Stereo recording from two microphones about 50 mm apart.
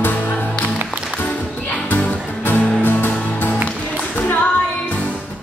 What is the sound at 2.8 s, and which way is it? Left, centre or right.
Music, left.